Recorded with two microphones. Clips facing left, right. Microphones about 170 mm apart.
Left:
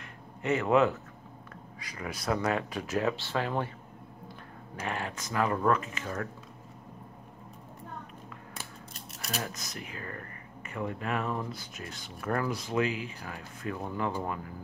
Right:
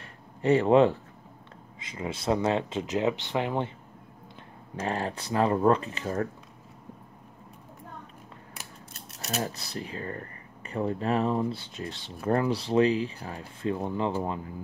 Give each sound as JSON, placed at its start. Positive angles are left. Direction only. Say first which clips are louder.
{"t": 0.4, "sound": "speech", "louder": "right 5 dB", "side_deg": -30}
{"t": 4.7, "sound": "speech", "louder": "right 5 dB", "side_deg": -35}
{"t": 9.2, "sound": "speech", "louder": "right 5 dB", "side_deg": -25}